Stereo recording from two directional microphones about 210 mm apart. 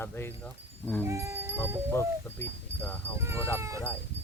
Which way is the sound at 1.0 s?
15° right (ahead or behind).